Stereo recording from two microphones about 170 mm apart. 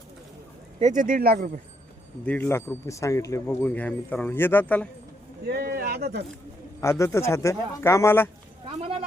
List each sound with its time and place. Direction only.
0.8 s speech: 45° right (ahead or behind)
2.2 s speech: 10° left (ahead or behind)
5.5 s speech: 75° right (ahead or behind)
7.0 s speech: 15° left (ahead or behind)
8.8 s a sound: 35° right (ahead or behind)